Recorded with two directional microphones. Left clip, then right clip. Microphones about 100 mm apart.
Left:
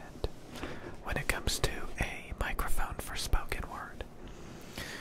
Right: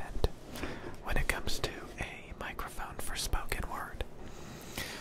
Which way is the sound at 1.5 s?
20° left (ahead or behind).